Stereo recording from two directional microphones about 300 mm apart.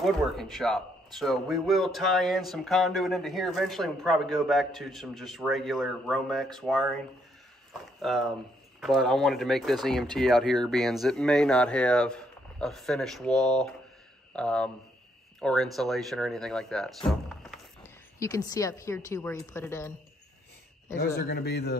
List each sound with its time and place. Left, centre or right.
0.0 s speech: centre
21.2 s a man's voice: left